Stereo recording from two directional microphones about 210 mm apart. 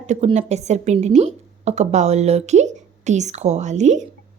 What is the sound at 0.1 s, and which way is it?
Speech, 30° right (ahead or behind).